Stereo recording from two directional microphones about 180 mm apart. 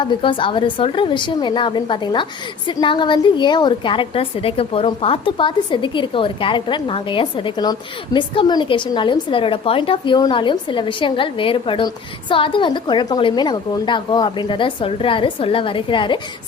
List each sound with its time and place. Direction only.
0.0 s a woman's voice: 25° left (ahead or behind)